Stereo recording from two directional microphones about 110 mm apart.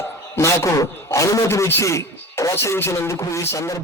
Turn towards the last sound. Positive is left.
turn(degrees=25)  # may be behind; listen again after turning